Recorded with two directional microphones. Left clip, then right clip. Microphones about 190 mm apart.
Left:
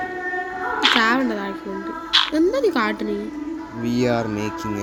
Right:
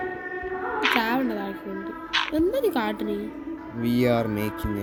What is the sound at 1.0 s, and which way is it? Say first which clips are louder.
Speech: left 6 dB; 25° left (ahead or behind).